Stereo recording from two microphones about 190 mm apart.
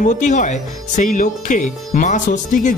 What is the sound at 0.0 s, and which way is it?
Speech, 40° left (ahead or behind).